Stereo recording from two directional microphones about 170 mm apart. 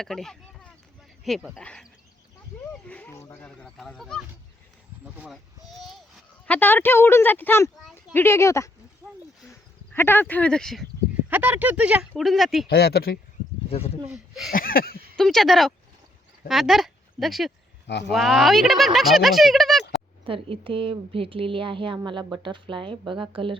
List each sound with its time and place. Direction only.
0.0 s speech: centre (ahead or behind)
3.6 s speech: centre (ahead or behind)
11.3 s speech: 10° right (ahead or behind)
12.6 s speech: 70° left (ahead or behind)
13.7 s speech: 35° left (ahead or behind)
14.1 s speech: centre (ahead or behind)
14.5 s a sound: 60° left (ahead or behind)
15.1 s speech: 5° left (ahead or behind)
17.8 s speech: 85° left
18.1 s speech: centre (ahead or behind)
20.2 s speech: 30° right (ahead or behind)